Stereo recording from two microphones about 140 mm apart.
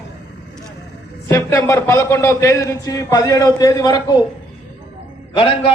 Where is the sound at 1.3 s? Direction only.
15° left (ahead or behind).